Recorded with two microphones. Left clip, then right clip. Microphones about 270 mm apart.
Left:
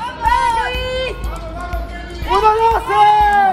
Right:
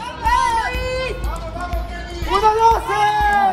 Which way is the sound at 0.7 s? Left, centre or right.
Left.